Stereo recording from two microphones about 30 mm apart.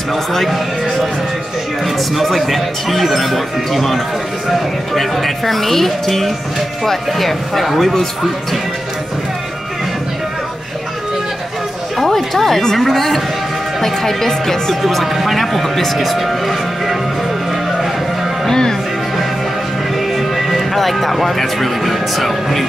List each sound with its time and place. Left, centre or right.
0.1 s speech: centre
1.9 s speech: centre
12.0 s speech: centre
14.8 s speech: centre
16.0 s music: centre
18.5 s speech: centre
20.0 s music: centre
21.4 s speech: centre